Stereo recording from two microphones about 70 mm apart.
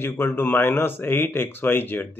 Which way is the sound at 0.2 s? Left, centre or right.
Left.